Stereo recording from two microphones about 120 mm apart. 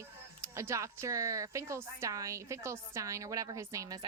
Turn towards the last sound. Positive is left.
turn(degrees=-25)  # may be behind; listen again after turning